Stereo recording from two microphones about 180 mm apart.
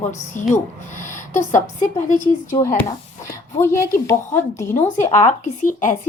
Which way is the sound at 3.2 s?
15° left (ahead or behind).